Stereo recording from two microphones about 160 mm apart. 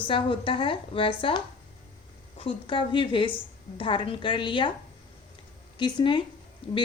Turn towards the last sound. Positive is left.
turn(degrees=35)  # may be behind; listen again after turning